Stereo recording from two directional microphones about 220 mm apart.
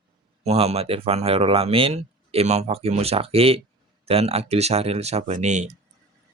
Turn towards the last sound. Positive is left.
turn(degrees=-30)  # may be behind; listen again after turning